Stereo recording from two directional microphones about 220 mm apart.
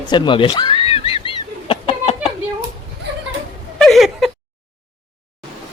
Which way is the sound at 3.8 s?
Centre (ahead or behind).